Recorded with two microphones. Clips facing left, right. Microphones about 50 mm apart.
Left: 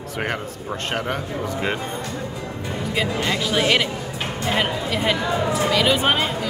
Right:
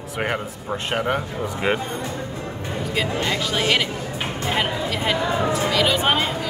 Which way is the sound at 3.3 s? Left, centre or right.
Centre.